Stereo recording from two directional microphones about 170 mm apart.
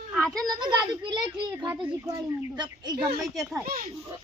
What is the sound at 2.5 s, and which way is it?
Speech, 25° right (ahead or behind).